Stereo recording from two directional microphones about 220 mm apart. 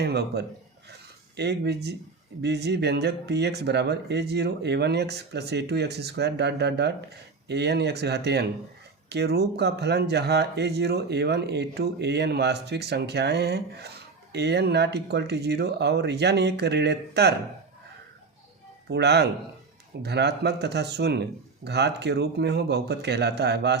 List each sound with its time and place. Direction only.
0.0 s speech: 50° right (ahead or behind)
18.9 s speech: 50° right (ahead or behind)